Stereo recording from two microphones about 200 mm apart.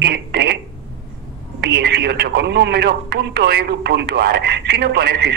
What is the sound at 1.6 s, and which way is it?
Speech, 55° right (ahead or behind).